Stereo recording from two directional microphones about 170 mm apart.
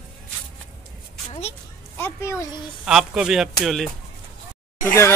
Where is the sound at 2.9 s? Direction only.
5° right (ahead or behind).